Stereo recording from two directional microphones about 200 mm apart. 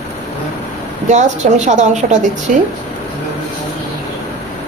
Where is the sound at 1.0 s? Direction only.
35° right (ahead or behind).